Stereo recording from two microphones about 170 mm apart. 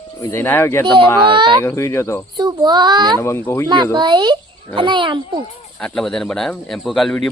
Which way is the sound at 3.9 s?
25° right (ahead or behind).